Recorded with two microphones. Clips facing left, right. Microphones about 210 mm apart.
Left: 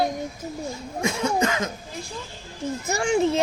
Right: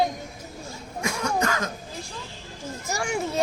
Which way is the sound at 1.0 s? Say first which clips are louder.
Left 3 dB; 20° left (ahead or behind).